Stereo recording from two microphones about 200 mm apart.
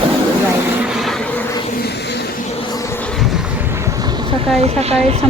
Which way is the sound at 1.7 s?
50° left (ahead or behind).